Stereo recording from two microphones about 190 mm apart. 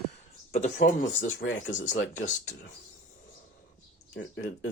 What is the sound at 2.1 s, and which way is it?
Speech, 40° left (ahead or behind).